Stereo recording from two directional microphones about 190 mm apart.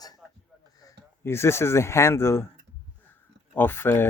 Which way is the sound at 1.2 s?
15° left (ahead or behind).